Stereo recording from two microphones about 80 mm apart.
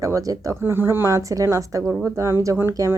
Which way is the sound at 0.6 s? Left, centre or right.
Right.